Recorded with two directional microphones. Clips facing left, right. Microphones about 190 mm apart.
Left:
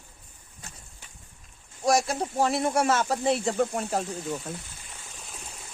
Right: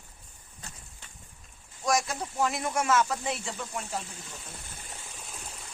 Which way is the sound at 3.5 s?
55° left (ahead or behind).